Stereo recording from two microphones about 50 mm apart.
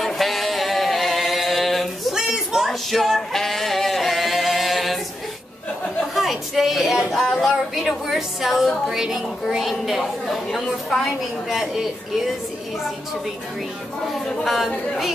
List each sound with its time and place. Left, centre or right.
0.0 s a capella: centre
2.1 s a sound: centre
2.7 s singing: centre
6.1 s a sound: centre
7.1 s speech: centre
11.4 s speech: centre
14.4 s speech: centre